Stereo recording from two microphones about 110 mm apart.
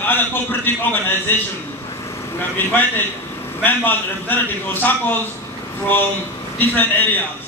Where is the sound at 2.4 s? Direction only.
20° left (ahead or behind).